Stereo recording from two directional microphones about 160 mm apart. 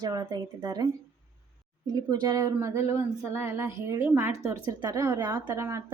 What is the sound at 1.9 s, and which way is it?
Speech, 25° right (ahead or behind).